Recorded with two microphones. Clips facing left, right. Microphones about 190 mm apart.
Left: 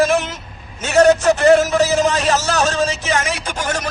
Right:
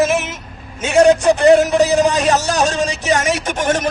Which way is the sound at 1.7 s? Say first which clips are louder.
Right 2 dB; 35° right (ahead or behind).